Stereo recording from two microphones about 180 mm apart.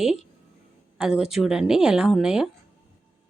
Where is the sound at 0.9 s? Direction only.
5° right (ahead or behind).